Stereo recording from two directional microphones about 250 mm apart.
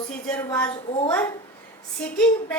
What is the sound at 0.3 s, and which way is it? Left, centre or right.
Speech, centre.